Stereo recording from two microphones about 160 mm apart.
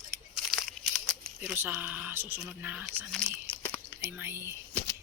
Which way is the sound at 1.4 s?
10° right (ahead or behind).